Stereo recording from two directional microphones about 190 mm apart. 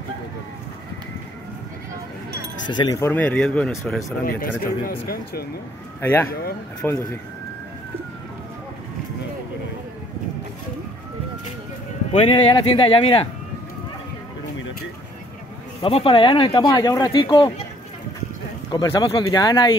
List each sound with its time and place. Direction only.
2.7 s speech: 20° left (ahead or behind)
4.2 s speech: 50° left (ahead or behind)
5.9 s speech: 15° left (ahead or behind)
12.1 s speech: 30° left (ahead or behind)
15.8 s speech: 30° left (ahead or behind)
18.7 s speech: 20° left (ahead or behind)